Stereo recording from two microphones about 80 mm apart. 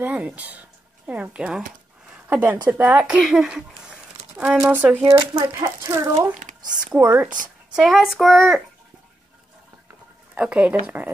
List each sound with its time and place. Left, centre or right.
0.0 s speech: right
3.2 s speech: centre
5.1 s speech: right
6.8 s speech: centre
7.7 s child singing: centre
10.3 s speech: centre